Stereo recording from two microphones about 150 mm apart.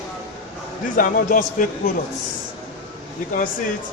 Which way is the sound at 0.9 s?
65° left (ahead or behind).